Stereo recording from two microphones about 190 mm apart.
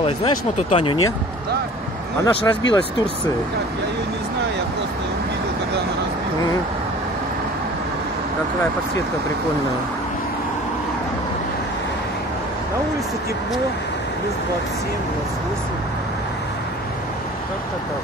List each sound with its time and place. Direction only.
0.0 s speech: 35° left (ahead or behind)
2.2 s speech: 20° left (ahead or behind)